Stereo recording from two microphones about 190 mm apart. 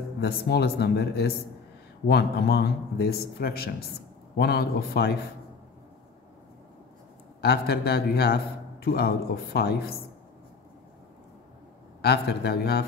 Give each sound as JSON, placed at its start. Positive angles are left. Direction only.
{"t": 0.2, "sound": "a man's voice", "side_deg": 60}
{"t": 7.4, "sound": "a man's voice", "side_deg": 55}
{"t": 12.0, "sound": "a man's voice", "side_deg": 60}